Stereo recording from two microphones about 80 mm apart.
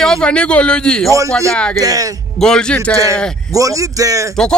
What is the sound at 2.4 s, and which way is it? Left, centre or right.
Speech, centre.